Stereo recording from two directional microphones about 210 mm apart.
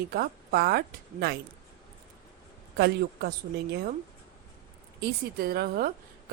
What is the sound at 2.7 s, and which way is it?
A woman's voice, 50° right (ahead or behind).